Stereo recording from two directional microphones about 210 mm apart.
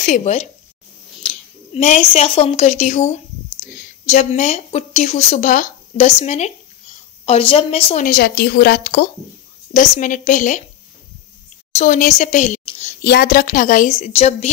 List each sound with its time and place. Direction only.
0.0 s a woman's voice: 35° left (ahead or behind)
1.7 s a child's voice: 30° left (ahead or behind)
8.0 s speech: 45° left (ahead or behind)
9.8 s speech: 35° left (ahead or behind)
11.7 s a woman's voice: 35° left (ahead or behind)
13.0 s speech: 45° left (ahead or behind)